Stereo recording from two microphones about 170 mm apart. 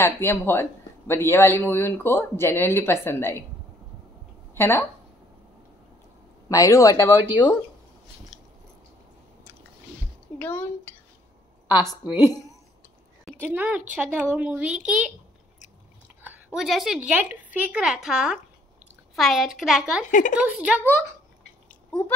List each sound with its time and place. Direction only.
0.0 s a man's voice: 15° left (ahead or behind)
4.6 s a man's voice: 15° left (ahead or behind)
6.5 s speech: 20° left (ahead or behind)
10.4 s a man's voice: 10° left (ahead or behind)
12.2 s a woman's voice: 15° right (ahead or behind)
16.2 s a woman's voice: 10° right (ahead or behind)
20.1 s speech: 50° left (ahead or behind)
20.3 s speech: 5° right (ahead or behind)